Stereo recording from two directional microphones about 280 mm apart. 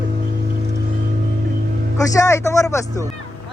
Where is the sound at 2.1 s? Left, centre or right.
Centre.